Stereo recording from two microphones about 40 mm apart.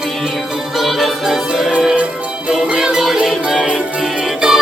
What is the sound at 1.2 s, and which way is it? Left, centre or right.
Music, centre.